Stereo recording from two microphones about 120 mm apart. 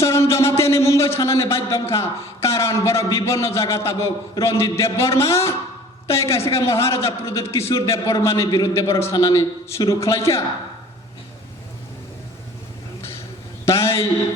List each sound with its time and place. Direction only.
0.0 s a man's voice: 25° left (ahead or behind)
13.7 s a man's voice: 25° left (ahead or behind)